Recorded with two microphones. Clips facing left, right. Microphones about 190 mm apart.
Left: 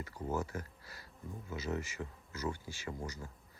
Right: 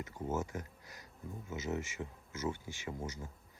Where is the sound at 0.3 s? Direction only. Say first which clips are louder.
Even; 20° right (ahead or behind).